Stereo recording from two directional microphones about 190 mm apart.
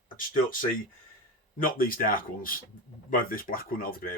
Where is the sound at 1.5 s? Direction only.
50° left (ahead or behind).